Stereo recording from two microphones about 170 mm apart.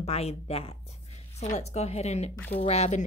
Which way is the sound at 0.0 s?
40° left (ahead or behind).